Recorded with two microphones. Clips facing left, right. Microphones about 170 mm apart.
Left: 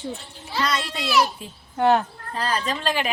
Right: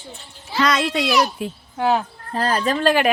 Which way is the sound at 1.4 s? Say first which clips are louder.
Right 12 dB; 70° right (ahead or behind).